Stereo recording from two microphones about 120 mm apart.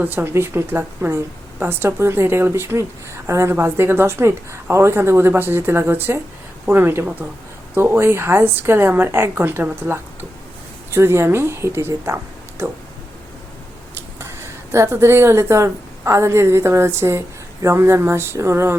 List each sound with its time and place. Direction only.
0.0 s a woman's voice: 15° right (ahead or behind)
14.2 s speech: 20° right (ahead or behind)